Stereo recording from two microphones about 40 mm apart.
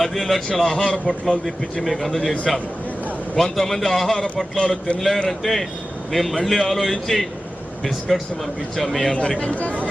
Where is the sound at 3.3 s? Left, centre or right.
Centre.